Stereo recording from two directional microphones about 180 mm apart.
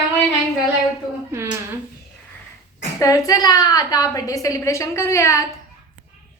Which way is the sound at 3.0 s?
20° left (ahead or behind).